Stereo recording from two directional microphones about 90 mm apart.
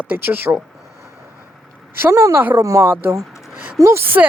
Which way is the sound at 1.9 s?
25° right (ahead or behind).